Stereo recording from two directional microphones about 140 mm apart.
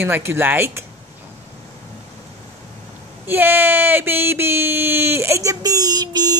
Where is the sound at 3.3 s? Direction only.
15° right (ahead or behind).